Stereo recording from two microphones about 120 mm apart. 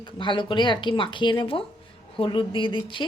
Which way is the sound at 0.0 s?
40° left (ahead or behind).